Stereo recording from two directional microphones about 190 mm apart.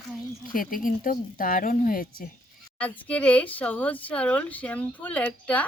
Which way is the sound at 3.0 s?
5° left (ahead or behind).